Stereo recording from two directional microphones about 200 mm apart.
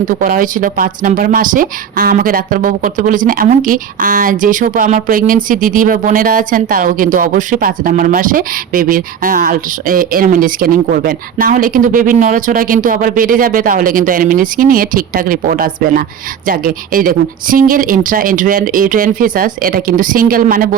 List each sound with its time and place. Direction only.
0.0 s speech: 45° right (ahead or behind)